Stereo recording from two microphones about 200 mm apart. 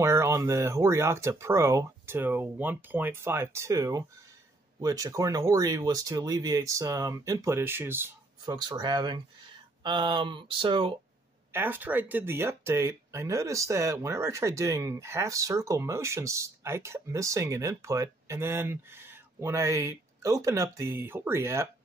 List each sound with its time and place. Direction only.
0.0 s speech: 15° right (ahead or behind)
8.5 s speech: 20° right (ahead or behind)
11.5 s speech: 10° right (ahead or behind)